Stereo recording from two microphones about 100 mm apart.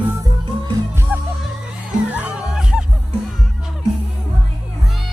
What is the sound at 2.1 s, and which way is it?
Music, 15° right (ahead or behind).